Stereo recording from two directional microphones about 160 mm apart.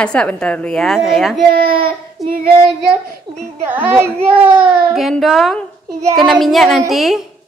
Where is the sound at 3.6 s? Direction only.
10° right (ahead or behind).